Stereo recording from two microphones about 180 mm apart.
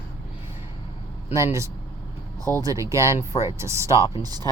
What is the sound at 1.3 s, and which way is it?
Speech, 15° right (ahead or behind).